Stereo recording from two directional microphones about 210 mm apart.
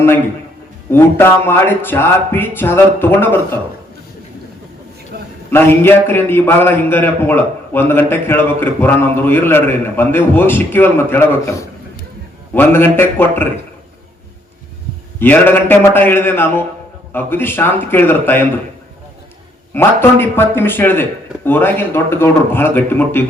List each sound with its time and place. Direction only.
0.9 s a man's voice: 10° left (ahead or behind)
5.1 s a sound: 45° right (ahead or behind)
5.5 s a man's voice: 10° left (ahead or behind)
15.2 s a man's voice: 10° left (ahead or behind)
19.7 s a man's voice: 10° left (ahead or behind)